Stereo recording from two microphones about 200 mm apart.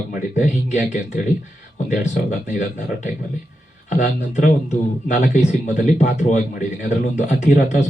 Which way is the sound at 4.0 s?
40° left (ahead or behind).